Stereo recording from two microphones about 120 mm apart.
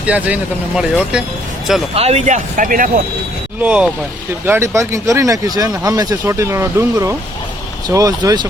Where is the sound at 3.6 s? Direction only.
10° right (ahead or behind).